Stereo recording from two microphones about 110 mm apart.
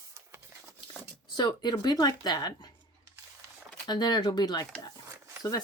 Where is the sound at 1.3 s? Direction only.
40° left (ahead or behind).